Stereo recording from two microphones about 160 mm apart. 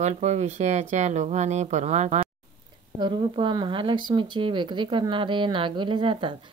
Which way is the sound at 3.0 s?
30° right (ahead or behind).